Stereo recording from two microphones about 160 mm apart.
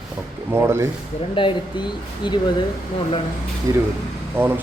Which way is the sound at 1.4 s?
30° left (ahead or behind).